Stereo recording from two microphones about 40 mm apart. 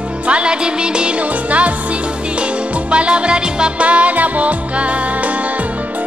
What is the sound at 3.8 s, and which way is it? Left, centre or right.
Music, right.